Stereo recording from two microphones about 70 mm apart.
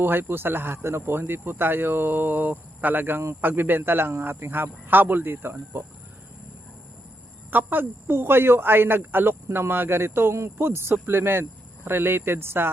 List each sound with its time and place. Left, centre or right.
0.0 s speech: right
7.5 s speech: right